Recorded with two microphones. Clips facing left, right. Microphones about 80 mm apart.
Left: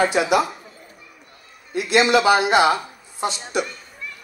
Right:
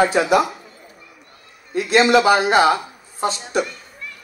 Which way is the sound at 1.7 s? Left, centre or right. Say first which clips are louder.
Right 2 dB; right.